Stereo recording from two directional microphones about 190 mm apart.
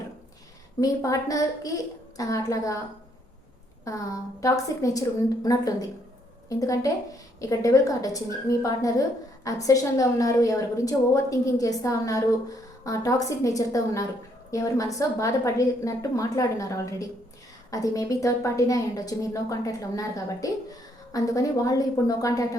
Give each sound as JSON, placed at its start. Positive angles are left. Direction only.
{"t": 0.8, "sound": "a woman's voice", "side_deg": 15}
{"t": 3.8, "sound": "a woman's voice", "side_deg": 15}